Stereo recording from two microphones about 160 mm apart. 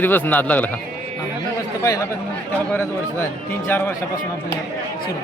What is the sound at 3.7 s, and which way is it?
Speech, 15° left (ahead or behind).